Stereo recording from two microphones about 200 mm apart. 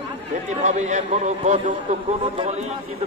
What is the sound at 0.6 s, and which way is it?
Speech, 35° right (ahead or behind).